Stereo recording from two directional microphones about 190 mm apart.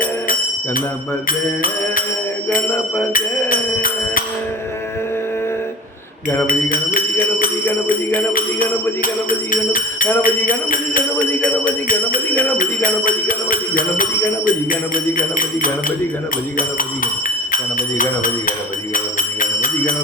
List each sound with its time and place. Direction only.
3.1 s music: 45° left (ahead or behind)
6.5 s speech: 50° left (ahead or behind)
9.3 s speech: 45° left (ahead or behind)
17.2 s speech: 45° left (ahead or behind)
18.9 s a sound: 45° left (ahead or behind)